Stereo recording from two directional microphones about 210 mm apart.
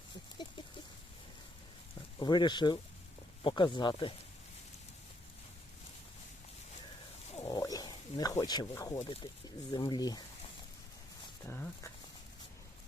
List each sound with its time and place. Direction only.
2.1 s speech: 20° left (ahead or behind)
7.3 s wild animals: 20° left (ahead or behind)
8.4 s speech: 20° left (ahead or behind)
11.4 s speech: 10° left (ahead or behind)